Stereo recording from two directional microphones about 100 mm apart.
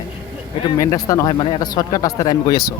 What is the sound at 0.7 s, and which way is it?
Speech, 40° left (ahead or behind).